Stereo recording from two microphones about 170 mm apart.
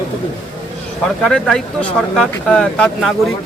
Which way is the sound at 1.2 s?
5° left (ahead or behind).